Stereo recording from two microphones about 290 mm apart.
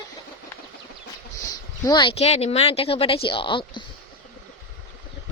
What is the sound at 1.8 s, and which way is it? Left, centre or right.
Speech, centre.